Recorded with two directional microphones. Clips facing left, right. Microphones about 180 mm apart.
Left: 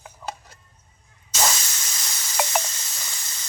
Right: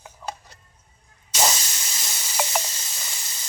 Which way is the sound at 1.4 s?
20° right (ahead or behind).